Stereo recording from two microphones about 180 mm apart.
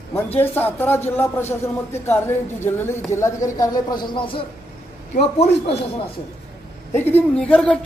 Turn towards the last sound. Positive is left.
turn(degrees=5)  # may be behind; listen again after turning